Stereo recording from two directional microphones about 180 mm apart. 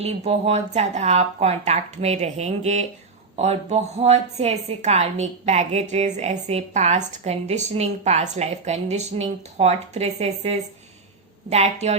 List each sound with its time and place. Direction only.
0.0 s a woman's voice: 35° right (ahead or behind)